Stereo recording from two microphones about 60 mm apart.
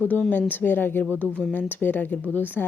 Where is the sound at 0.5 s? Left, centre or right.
Left.